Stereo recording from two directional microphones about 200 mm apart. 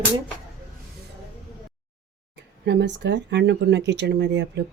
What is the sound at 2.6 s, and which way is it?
Speech, 60° right (ahead or behind).